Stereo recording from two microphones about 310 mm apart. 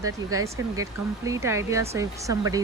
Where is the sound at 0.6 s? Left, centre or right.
Right.